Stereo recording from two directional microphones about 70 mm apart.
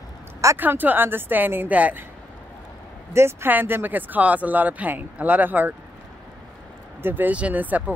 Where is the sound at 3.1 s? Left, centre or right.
Right.